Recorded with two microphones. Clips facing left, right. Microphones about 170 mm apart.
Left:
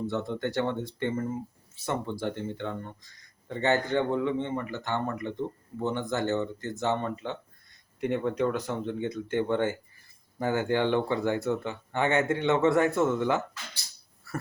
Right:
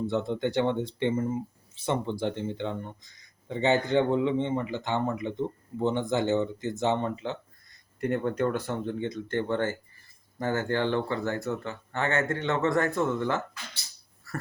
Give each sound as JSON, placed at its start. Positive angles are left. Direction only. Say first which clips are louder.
{"t": 0.1, "sound": "speech", "louder": "right 3 dB", "side_deg": -20}
{"t": 8.0, "sound": "speech", "louder": "even", "side_deg": 0}
{"t": 9.0, "sound": "a man's voice", "louder": "left 1 dB", "side_deg": 10}